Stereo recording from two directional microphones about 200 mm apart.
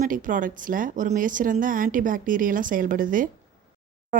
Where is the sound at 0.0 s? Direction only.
40° right (ahead or behind).